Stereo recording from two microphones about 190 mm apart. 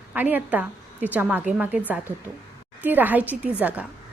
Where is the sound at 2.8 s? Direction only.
10° right (ahead or behind).